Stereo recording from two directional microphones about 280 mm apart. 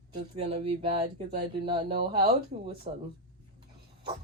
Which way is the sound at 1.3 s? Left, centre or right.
Right.